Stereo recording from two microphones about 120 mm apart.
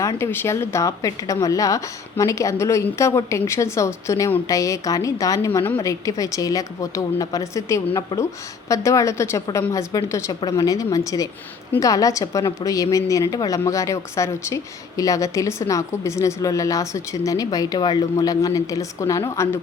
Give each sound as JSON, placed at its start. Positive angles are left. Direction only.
{"t": 0.0, "sound": "a woman's voice", "side_deg": 25}